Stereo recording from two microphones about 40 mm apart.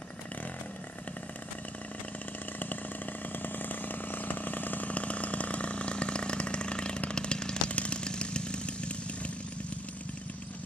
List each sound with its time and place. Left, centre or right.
3.4 s chainsaw: left